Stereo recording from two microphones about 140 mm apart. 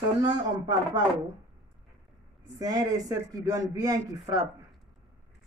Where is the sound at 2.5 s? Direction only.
25° right (ahead or behind).